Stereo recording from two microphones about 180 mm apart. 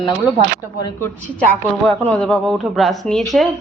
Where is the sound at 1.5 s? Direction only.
5° left (ahead or behind).